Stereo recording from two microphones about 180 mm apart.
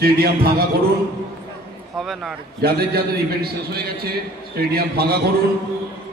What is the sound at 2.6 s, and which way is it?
A man's voice, 60° right (ahead or behind).